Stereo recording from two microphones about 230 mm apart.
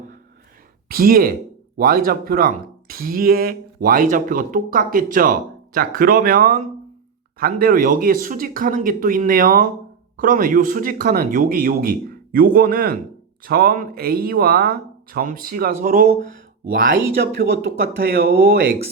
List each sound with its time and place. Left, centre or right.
0.9 s speech: right
18.2 s speech: right